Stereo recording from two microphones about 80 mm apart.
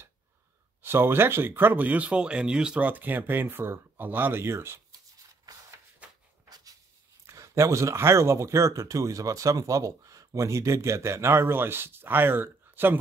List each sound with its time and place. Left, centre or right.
0.8 s speech: right
6.0 s shuffle: centre
7.2 s speech: right